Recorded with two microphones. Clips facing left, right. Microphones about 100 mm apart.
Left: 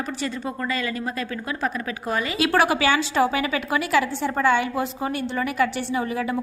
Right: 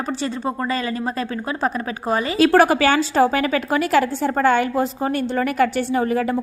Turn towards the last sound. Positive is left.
turn(degrees=-45)  # may be behind; listen again after turning